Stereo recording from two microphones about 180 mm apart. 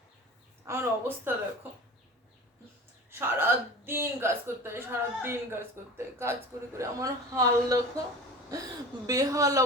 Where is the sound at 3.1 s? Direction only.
15° right (ahead or behind).